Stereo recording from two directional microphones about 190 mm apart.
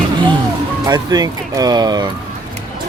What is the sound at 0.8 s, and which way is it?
Speech, 20° right (ahead or behind).